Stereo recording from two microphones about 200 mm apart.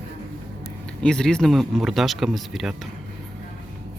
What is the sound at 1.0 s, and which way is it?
Speech, 5° left (ahead or behind).